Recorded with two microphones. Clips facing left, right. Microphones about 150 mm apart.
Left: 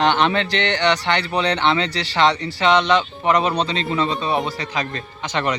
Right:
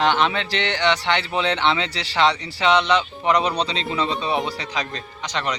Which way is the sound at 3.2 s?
45° left (ahead or behind).